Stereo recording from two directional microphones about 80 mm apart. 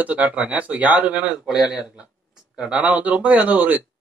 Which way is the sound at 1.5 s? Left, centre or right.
Centre.